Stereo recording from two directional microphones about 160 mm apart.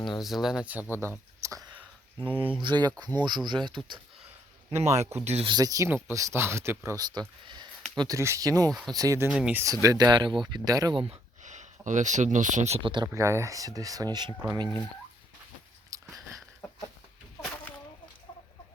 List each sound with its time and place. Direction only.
0.2 s speech: centre (ahead or behind)
2.6 s speech: 30° right (ahead or behind)
4.8 s speech: 45° right (ahead or behind)
5.5 s speech: 25° right (ahead or behind)
9.3 s speech: 5° right (ahead or behind)
9.8 s speech: 20° right (ahead or behind)
11.0 s speech: 45° right (ahead or behind)
13.1 s speech: 20° right (ahead or behind)
15.9 s chewing: 20° right (ahead or behind)